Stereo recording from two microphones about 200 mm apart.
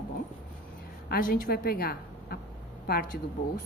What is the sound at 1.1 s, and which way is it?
A woman's voice, 45° left (ahead or behind).